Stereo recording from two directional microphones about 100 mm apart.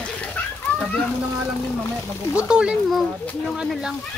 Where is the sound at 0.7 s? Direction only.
20° left (ahead or behind).